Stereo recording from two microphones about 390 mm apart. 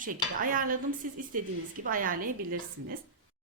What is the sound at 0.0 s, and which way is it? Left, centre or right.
A woman's voice, right.